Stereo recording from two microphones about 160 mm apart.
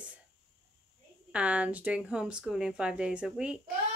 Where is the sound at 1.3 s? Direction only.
10° right (ahead or behind).